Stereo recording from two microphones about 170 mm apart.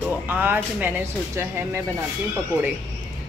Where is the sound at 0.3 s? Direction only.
10° right (ahead or behind).